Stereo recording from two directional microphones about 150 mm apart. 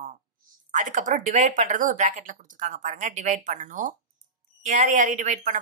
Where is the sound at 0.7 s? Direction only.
60° right (ahead or behind).